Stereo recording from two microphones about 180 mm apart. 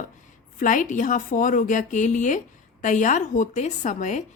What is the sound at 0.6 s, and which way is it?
A woman's voice, 45° left (ahead or behind).